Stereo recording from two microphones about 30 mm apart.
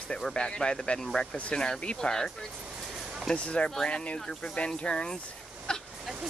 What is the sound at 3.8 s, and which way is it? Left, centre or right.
Speech, left.